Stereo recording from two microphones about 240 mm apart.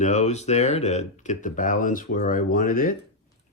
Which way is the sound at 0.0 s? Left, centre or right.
Left.